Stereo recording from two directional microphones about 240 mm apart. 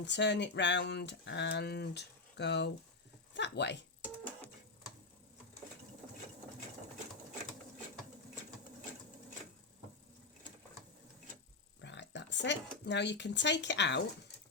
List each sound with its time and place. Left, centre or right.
0.0 s speech: left
11.8 s speech: left